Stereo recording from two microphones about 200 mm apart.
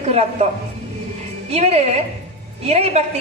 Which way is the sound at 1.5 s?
30° right (ahead or behind).